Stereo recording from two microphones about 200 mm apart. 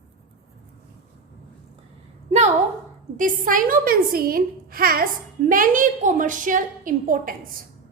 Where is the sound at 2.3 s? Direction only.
35° right (ahead or behind).